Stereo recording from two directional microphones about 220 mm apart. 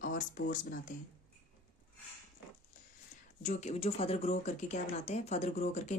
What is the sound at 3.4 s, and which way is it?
Speech, 30° left (ahead or behind).